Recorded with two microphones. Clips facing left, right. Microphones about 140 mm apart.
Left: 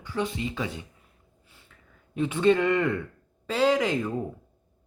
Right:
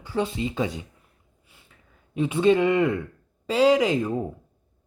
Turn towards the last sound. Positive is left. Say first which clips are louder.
# right 4 dB
turn(degrees=-20)  # may be behind; listen again after turning